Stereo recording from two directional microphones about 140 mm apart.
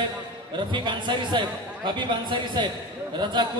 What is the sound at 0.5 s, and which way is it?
A man's voice, 35° right (ahead or behind).